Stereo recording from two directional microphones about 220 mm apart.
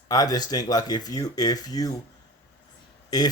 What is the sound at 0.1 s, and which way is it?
Speech, 15° left (ahead or behind).